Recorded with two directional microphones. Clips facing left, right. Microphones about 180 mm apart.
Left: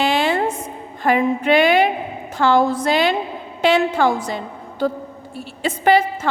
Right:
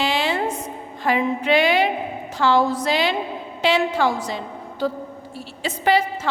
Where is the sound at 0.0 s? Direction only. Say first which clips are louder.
Left 4 dB; 50° left (ahead or behind).